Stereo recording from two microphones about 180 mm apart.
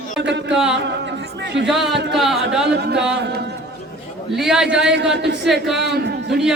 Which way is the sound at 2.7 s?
70° right (ahead or behind).